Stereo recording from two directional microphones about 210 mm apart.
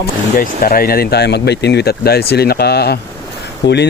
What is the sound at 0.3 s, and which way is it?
Speech, 45° left (ahead or behind).